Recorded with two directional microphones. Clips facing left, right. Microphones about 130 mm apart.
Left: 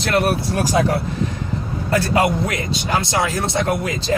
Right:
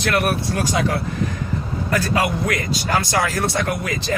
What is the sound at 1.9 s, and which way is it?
A man's voice, 25° left (ahead or behind).